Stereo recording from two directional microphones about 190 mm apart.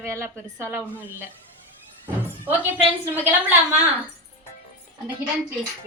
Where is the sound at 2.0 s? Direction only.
10° right (ahead or behind).